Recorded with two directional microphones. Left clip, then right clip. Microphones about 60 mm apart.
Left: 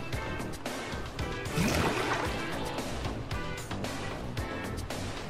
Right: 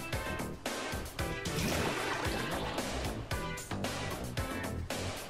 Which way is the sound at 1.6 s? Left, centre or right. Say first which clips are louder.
Left 5 dB; centre.